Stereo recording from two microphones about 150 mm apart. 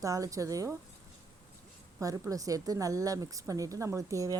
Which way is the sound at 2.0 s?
25° right (ahead or behind).